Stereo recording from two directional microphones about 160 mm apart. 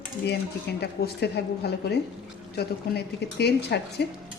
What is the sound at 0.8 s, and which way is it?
A woman's voice, 90° left.